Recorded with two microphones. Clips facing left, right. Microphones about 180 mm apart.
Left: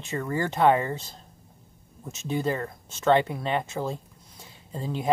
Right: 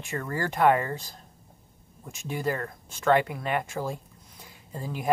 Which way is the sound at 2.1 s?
25° left (ahead or behind).